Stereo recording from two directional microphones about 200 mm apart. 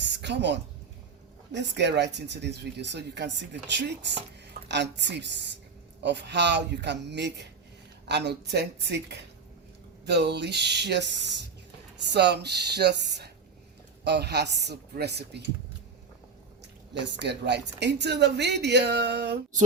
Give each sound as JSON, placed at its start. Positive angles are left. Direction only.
{"t": 0.0, "sound": "a sound", "side_deg": -60}
{"t": 1.5, "sound": "speech", "side_deg": -60}
{"t": 16.9, "sound": "speech", "side_deg": -60}